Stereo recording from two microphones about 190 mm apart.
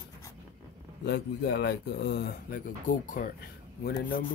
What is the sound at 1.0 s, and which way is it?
Speech, 65° left (ahead or behind).